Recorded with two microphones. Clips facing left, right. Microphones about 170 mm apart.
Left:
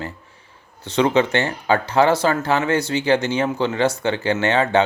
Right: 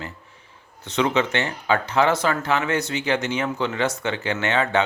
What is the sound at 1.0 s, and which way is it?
Speech, 35° left (ahead or behind).